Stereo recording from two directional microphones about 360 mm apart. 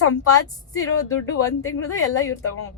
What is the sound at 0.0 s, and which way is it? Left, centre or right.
Speech, left.